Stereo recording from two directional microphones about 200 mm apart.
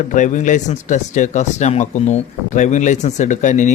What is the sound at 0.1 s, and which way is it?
Speech, 40° left (ahead or behind).